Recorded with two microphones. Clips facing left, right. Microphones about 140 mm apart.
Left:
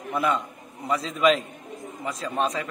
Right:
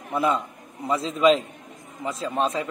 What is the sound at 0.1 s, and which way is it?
A man's voice, 30° right (ahead or behind).